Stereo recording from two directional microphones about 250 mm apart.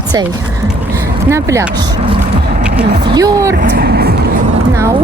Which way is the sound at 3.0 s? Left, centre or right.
Centre.